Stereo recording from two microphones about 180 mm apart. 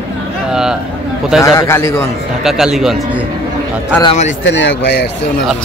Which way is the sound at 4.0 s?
35° left (ahead or behind).